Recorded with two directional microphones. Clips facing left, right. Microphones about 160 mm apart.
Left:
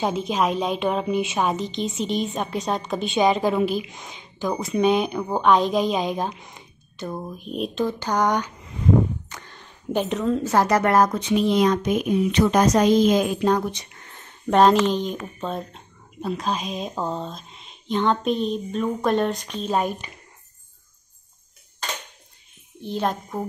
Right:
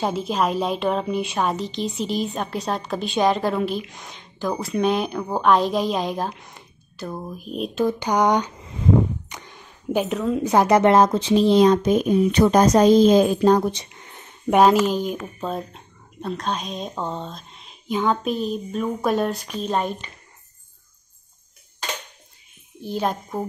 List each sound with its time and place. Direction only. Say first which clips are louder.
0.0 s a woman's voice: even; centre (ahead or behind)
7.8 s a sound: right 3 dB; 15° right (ahead or behind)
10.4 s speech: right 6 dB; 15° right (ahead or behind); by 13.8 s 35° right (ahead or behind)
13.9 s speech: right 2 dB; 15° right (ahead or behind)
19.7 s speech: left 1 dB; 10° left (ahead or behind)
22.8 s a woman's voice: right 1 dB; 5° right (ahead or behind)